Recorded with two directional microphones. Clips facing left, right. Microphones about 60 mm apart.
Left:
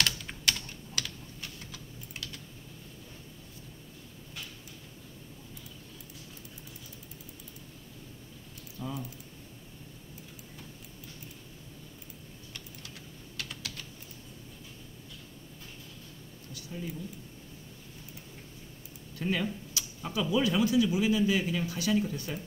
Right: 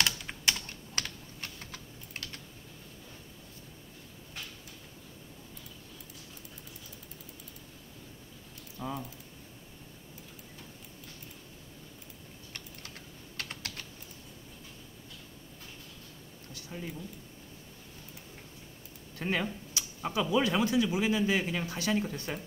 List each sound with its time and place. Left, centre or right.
0.0 s typing: centre
0.9 s typing: right
8.7 s typing: right
13.4 s typing: right
19.1 s speech: right